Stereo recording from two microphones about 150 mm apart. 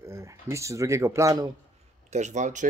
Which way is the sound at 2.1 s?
50° right (ahead or behind).